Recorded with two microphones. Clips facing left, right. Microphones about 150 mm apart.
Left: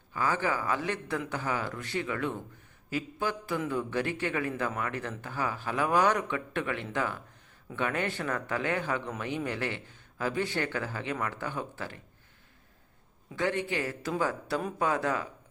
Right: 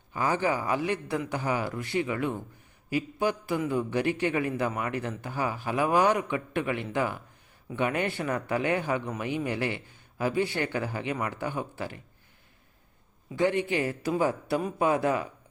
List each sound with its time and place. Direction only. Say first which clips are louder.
0.1 s a man's voice: right 3 dB; 20° right (ahead or behind)
13.3 s a man's voice: right 4 dB; 15° right (ahead or behind)